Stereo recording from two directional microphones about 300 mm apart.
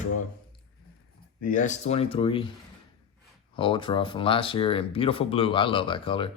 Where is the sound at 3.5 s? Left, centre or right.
Centre.